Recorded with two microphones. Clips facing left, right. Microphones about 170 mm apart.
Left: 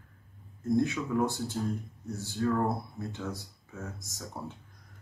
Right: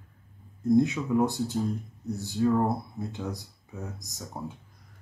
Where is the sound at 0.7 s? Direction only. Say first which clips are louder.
Right 4 dB; 20° right (ahead or behind).